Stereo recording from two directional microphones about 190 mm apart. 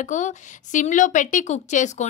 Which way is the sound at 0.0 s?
40° left (ahead or behind).